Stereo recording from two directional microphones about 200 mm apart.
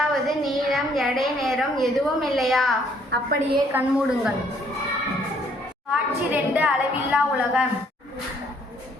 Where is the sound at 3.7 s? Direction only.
5° right (ahead or behind).